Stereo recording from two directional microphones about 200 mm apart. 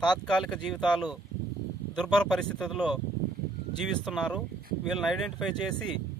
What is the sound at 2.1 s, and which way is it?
Speech, 5° left (ahead or behind).